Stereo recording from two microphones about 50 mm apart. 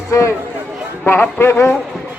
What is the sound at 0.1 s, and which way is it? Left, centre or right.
Speech, left.